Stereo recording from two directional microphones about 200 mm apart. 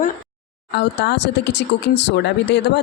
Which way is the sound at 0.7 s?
60° left (ahead or behind).